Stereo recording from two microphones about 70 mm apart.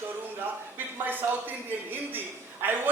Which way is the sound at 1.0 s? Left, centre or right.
Right.